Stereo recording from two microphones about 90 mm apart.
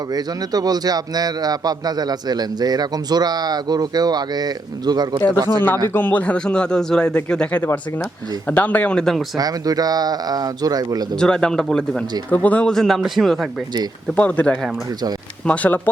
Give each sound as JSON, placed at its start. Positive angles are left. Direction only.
{"t": 0.1, "sound": "a man's voice", "side_deg": -45}
{"t": 5.9, "sound": "speech", "side_deg": 20}
{"t": 9.3, "sound": "a man's voice", "side_deg": -45}
{"t": 11.2, "sound": "speech", "side_deg": 10}
{"t": 14.2, "sound": "speech", "side_deg": 15}